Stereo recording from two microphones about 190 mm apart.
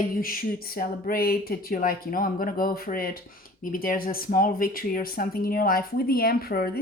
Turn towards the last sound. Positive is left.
turn(degrees=50)  # may be behind; listen again after turning